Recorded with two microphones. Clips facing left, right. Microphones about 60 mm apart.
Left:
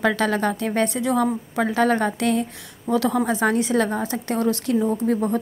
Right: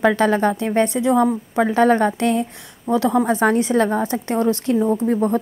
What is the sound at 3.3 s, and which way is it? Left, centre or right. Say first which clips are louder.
A woman's voice: right 3 dB; right.